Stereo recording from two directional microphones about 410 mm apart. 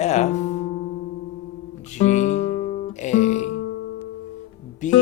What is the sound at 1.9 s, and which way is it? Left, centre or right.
Music, centre.